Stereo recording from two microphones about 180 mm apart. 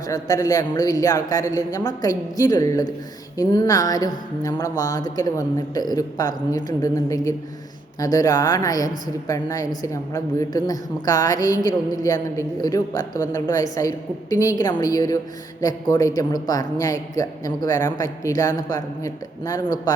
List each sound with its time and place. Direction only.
0.1 s a man's voice: 20° left (ahead or behind)